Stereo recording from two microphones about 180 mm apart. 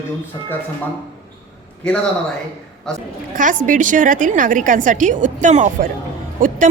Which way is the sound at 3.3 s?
45° right (ahead or behind).